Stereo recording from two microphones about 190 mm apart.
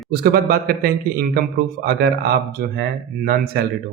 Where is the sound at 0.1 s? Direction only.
55° right (ahead or behind).